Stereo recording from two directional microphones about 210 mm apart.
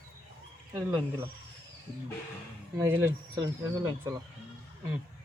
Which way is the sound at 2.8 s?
15° right (ahead or behind).